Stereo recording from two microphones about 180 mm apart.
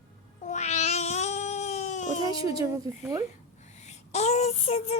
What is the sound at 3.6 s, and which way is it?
Speech, 40° left (ahead or behind).